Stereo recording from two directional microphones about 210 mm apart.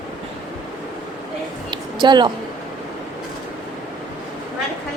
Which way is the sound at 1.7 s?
20° right (ahead or behind).